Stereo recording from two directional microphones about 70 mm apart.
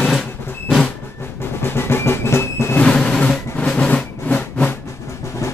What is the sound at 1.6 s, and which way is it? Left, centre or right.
Drum, left.